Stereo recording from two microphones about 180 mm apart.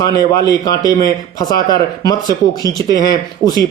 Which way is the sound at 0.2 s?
20° left (ahead or behind).